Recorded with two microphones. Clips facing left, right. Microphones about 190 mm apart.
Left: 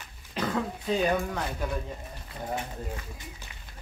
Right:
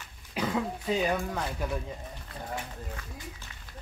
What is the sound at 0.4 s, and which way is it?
Throat clearing, 10° right (ahead or behind).